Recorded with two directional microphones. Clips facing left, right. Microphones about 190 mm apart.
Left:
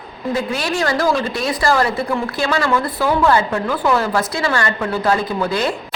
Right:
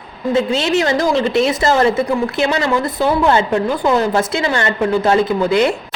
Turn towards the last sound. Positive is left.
turn(degrees=-20)  # may be behind; listen again after turning